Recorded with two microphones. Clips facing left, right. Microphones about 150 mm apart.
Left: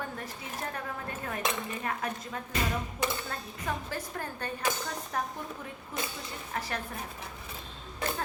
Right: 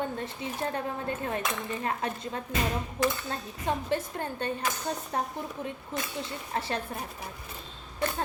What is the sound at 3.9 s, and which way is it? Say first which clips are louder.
A woman's voice: right 6 dB; 25° right (ahead or behind).